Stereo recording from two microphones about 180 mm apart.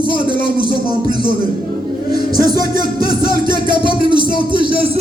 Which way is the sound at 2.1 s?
20° right (ahead or behind).